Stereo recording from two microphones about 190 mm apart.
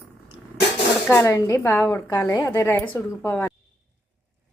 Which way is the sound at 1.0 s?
10° left (ahead or behind).